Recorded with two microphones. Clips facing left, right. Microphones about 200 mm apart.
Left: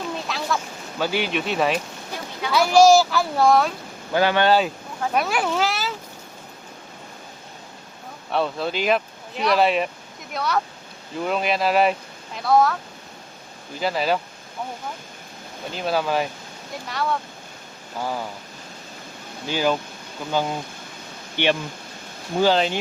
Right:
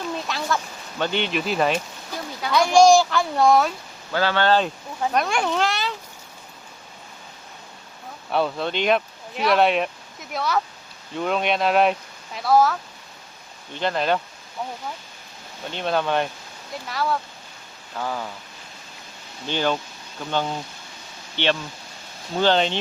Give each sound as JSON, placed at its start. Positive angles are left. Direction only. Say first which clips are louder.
{"t": 0.3, "sound": "speech", "louder": "even", "side_deg": 0}
{"t": 4.1, "sound": "speech", "louder": "left 2 dB", "side_deg": 15}
{"t": 8.3, "sound": "speech", "louder": "even", "side_deg": 0}
{"t": 13.7, "sound": "speech", "louder": "even", "side_deg": 5}
{"t": 15.7, "sound": "speech", "louder": "even", "side_deg": 5}
{"t": 18.0, "sound": "speech", "louder": "left 1 dB", "side_deg": 10}
{"t": 19.5, "sound": "speech", "louder": "left 1 dB", "side_deg": 10}